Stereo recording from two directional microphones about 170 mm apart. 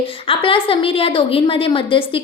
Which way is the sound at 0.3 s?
30° left (ahead or behind).